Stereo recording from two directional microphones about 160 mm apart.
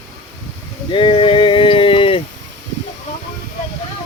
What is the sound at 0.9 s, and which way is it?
Speech, 30° left (ahead or behind).